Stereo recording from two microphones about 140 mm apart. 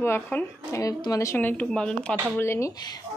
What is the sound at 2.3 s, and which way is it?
Speech, 20° left (ahead or behind).